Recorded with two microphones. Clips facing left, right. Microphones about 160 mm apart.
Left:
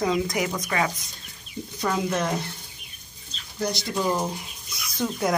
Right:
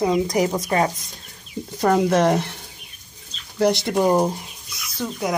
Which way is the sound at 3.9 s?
55° right (ahead or behind).